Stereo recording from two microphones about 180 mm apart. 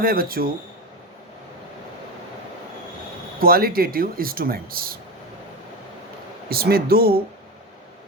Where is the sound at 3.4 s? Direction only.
55° right (ahead or behind).